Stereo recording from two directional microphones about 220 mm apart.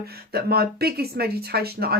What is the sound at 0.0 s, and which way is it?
Speech, 45° right (ahead or behind).